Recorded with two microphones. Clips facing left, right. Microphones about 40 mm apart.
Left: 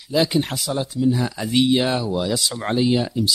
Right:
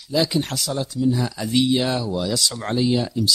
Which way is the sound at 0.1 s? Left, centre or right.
Centre.